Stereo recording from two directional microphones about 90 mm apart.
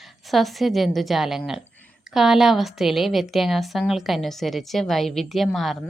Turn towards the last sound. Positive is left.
turn(degrees=0)  # may be behind; listen again after turning